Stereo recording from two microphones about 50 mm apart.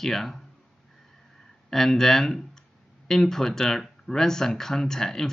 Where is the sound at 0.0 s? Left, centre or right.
Centre.